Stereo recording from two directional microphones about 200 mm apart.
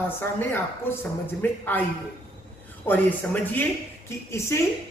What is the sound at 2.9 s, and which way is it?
A woman's voice, 10° left (ahead or behind).